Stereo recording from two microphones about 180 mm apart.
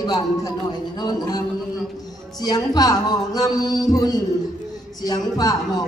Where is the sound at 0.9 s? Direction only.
20° left (ahead or behind).